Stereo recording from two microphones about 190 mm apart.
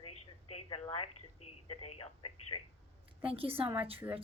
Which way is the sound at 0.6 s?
30° left (ahead or behind).